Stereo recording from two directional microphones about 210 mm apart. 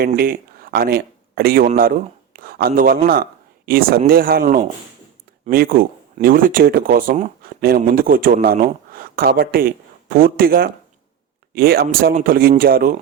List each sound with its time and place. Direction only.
0.2 s speech: 45° right (ahead or behind)